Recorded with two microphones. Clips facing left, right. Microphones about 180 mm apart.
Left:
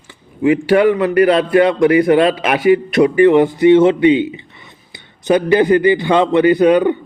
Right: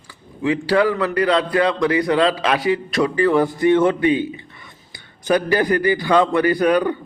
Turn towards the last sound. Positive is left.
turn(degrees=20)  # may be behind; listen again after turning